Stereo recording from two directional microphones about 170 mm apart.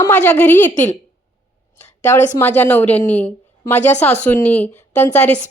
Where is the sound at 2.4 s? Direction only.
10° left (ahead or behind).